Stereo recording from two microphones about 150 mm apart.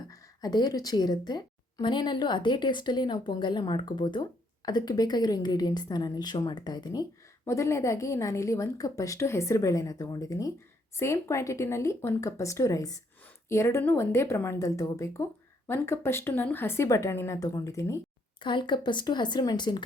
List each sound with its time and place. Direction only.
0.1 s a woman's voice: 25° left (ahead or behind)
18.3 s a woman's voice: 30° left (ahead or behind)